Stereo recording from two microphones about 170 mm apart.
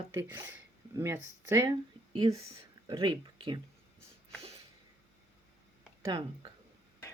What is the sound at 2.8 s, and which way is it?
Speech, 30° right (ahead or behind).